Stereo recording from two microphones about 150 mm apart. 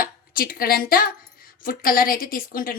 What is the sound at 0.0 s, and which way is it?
A woman's voice, 75° left (ahead or behind).